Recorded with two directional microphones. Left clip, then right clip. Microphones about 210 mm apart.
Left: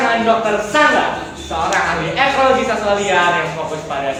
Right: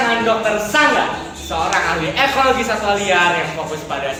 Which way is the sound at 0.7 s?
55° right (ahead or behind).